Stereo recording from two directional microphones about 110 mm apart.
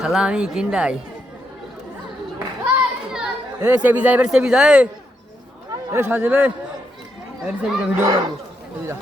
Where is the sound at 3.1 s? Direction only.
10° right (ahead or behind).